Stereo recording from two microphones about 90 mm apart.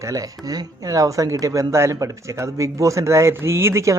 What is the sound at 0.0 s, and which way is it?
Speech, 40° right (ahead or behind).